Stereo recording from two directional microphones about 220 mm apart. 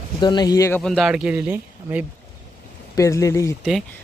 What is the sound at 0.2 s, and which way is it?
Speech, 20° left (ahead or behind).